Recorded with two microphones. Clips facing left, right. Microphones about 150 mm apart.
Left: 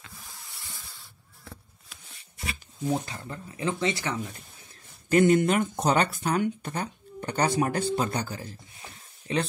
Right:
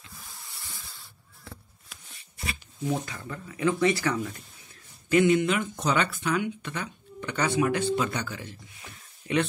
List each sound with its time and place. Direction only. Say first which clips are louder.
3.1 s speech: even; 30° left (ahead or behind)
5.1 s speech: left 1 dB; 45° left (ahead or behind)